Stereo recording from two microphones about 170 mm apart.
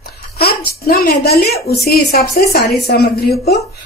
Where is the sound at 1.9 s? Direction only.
65° left (ahead or behind).